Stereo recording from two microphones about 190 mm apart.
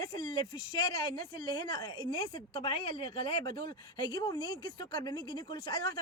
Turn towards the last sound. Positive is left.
turn(degrees=20)  # may be behind; listen again after turning